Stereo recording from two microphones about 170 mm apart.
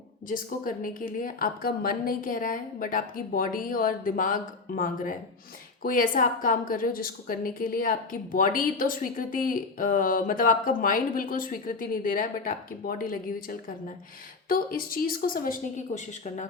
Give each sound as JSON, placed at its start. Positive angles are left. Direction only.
{"t": 0.3, "sound": "a woman's voice", "side_deg": 55}
{"t": 16.0, "sound": "a woman's voice", "side_deg": 45}